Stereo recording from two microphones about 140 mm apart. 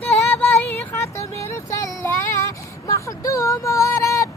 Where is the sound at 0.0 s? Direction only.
10° left (ahead or behind).